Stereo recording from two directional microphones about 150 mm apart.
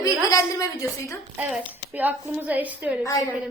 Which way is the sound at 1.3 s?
10° right (ahead or behind).